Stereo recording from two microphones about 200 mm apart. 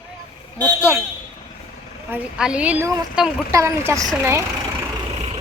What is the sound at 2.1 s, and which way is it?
Speech, 5° right (ahead or behind).